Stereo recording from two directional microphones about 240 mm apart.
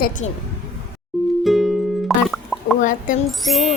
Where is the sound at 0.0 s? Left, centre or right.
Left.